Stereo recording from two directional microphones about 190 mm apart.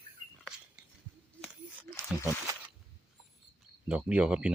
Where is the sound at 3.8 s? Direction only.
5° right (ahead or behind).